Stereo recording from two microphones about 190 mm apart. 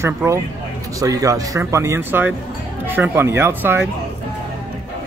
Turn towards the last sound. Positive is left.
turn(degrees=-10)  # may be behind; listen again after turning